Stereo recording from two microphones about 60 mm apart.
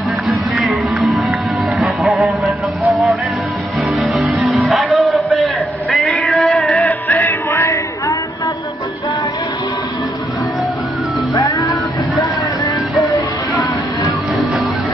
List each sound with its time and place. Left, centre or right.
0.6 s music: centre
3.9 s music: centre
6.9 s music: left
7.6 s a sound: left
11.4 s music: left